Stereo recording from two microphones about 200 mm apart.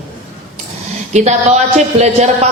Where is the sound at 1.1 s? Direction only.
35° right (ahead or behind).